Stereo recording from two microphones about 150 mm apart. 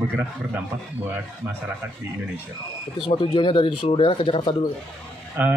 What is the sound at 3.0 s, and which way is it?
Speech, 35° left (ahead or behind).